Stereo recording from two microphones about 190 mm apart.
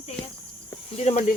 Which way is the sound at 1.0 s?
35° left (ahead or behind).